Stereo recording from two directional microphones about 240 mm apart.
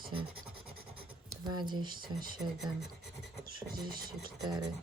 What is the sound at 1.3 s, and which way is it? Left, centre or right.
Speech, centre.